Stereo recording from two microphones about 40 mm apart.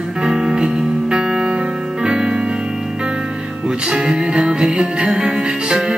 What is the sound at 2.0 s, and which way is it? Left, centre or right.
Music, centre.